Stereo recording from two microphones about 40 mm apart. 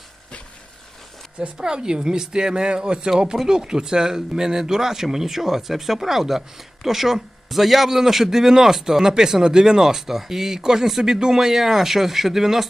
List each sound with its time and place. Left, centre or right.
1.5 s a man's voice: centre